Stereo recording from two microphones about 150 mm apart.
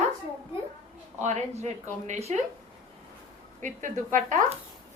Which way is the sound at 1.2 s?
50° right (ahead or behind).